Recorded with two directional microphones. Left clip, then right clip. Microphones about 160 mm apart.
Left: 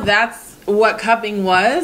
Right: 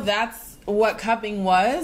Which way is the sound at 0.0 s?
35° right (ahead or behind).